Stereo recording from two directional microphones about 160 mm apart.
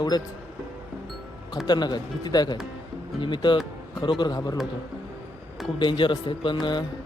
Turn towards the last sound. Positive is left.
turn(degrees=30)  # may be behind; listen again after turning